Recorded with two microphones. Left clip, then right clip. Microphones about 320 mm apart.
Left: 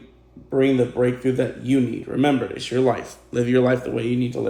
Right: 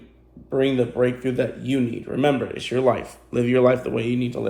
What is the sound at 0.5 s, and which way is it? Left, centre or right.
Speech, centre.